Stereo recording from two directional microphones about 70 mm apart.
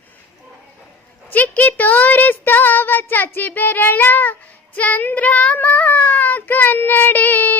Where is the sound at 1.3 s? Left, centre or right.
Left.